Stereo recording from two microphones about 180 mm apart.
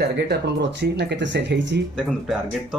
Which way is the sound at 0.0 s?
70° right (ahead or behind).